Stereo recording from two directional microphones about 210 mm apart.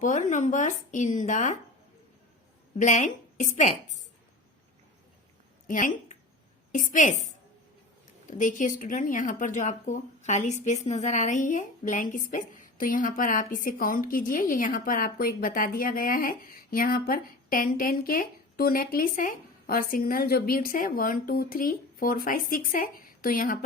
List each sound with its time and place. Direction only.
0.0 s speech: 35° left (ahead or behind)
2.7 s speech: 35° left (ahead or behind)
5.6 s a woman's voice: 40° left (ahead or behind)
8.3 s speech: 35° left (ahead or behind)